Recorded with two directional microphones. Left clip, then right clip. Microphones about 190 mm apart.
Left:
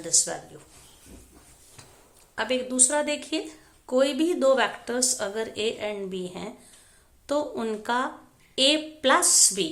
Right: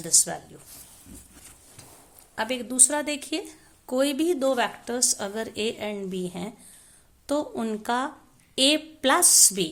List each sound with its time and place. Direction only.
0.0 s a woman's voice: 40° right (ahead or behind)
2.3 s a woman's voice: 40° right (ahead or behind)